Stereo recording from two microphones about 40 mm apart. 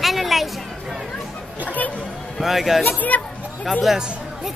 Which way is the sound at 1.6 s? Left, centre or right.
Left.